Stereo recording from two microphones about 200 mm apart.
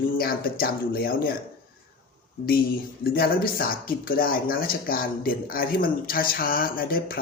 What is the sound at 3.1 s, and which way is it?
Speech, 50° left (ahead or behind).